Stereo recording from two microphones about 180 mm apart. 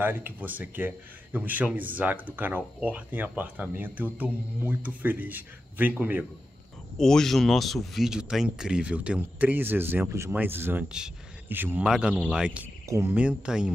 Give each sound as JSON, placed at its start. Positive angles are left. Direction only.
{"t": 0.0, "sound": "speech", "side_deg": -10}
{"t": 7.0, "sound": "speech", "side_deg": 5}